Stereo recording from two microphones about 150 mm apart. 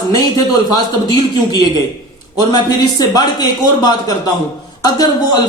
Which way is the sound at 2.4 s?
25° left (ahead or behind).